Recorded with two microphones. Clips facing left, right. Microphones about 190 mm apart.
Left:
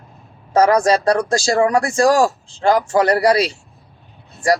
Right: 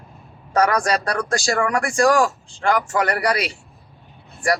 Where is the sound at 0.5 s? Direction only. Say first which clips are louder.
Left 5 dB; 25° left (ahead or behind).